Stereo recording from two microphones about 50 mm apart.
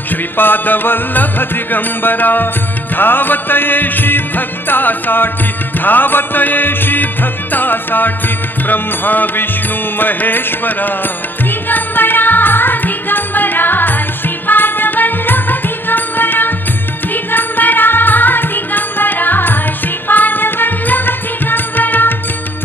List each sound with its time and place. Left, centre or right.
0.4 s music: left